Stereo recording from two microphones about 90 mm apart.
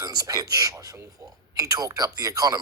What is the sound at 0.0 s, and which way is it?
Speech, 45° right (ahead or behind).